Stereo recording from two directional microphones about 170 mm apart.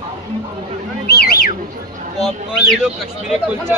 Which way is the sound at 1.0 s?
65° left (ahead or behind).